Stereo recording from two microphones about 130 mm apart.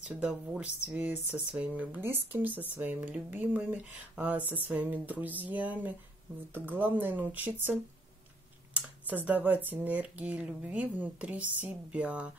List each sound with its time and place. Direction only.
0.0 s speech: 10° right (ahead or behind)
8.7 s speech: 10° right (ahead or behind)